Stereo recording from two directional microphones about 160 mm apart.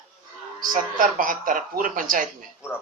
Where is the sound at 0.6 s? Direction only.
60° right (ahead or behind).